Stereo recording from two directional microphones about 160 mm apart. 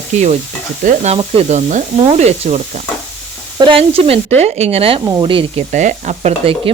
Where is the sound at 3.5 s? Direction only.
30° right (ahead or behind).